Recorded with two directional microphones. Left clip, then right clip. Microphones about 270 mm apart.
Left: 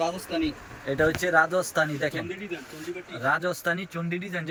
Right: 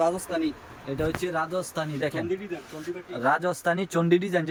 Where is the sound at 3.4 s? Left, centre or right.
Centre.